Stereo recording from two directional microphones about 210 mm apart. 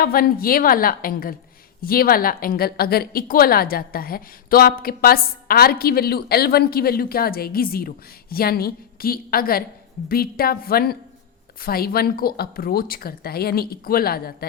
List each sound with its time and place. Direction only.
0.0 s a woman's voice: 45° left (ahead or behind)